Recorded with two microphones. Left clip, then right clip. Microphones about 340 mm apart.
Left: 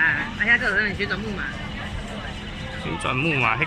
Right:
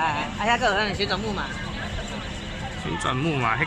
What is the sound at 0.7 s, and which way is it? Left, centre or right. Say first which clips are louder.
Speech: left 1 dB; centre.